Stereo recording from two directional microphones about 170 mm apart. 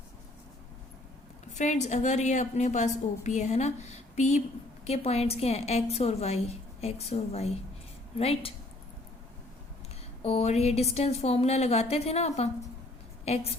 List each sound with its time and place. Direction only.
1.5 s a woman's voice: 45° left (ahead or behind)
10.2 s a woman's voice: 40° left (ahead or behind)